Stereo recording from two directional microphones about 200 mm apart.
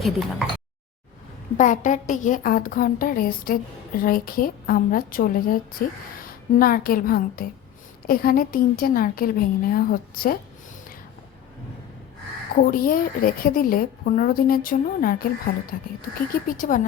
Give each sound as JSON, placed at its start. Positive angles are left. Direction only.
{"t": 0.0, "sound": "speech", "side_deg": 0}
{"t": 1.5, "sound": "a woman's voice", "side_deg": 40}
{"t": 12.5, "sound": "a woman's voice", "side_deg": 45}